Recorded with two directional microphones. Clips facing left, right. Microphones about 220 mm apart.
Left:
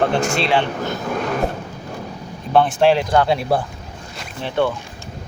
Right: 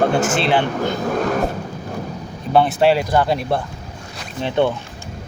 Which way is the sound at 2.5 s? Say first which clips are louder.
Even; 5° right (ahead or behind).